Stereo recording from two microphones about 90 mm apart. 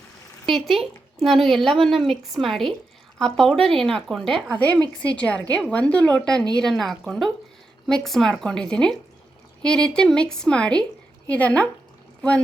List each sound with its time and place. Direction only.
0.4 s a woman's voice: centre (ahead or behind)